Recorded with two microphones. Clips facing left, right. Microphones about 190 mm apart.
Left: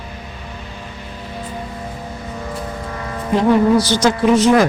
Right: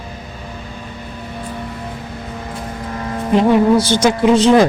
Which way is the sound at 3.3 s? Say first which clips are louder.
Right 1 dB; 25° right (ahead or behind).